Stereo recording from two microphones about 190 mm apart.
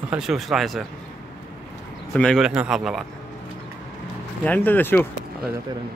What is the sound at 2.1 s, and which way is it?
Speech, centre (ahead or behind).